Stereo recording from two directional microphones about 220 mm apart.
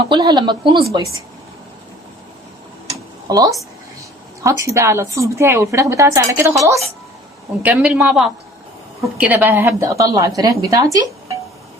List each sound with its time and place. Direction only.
0.0 s speech: 20° right (ahead or behind)
3.2 s a woman's voice: 15° right (ahead or behind)